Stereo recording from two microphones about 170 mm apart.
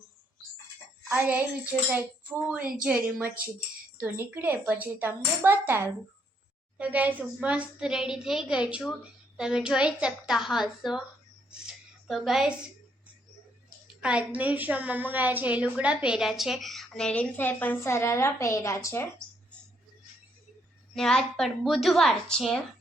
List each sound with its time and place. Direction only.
1.0 s music: 10° right (ahead or behind)
1.9 s a woman's voice: 10° right (ahead or behind)
11.6 s a sound: centre (ahead or behind)
14.0 s a woman's voice: 5° right (ahead or behind); by 19.0 s 20° left (ahead or behind)
20.9 s a woman's voice: centre (ahead or behind)